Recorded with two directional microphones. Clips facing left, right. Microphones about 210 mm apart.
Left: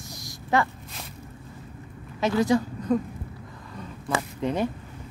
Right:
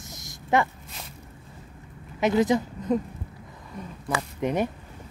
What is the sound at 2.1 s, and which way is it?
Speech, 20° right (ahead or behind).